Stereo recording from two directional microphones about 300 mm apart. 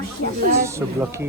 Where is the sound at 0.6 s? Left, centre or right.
Centre.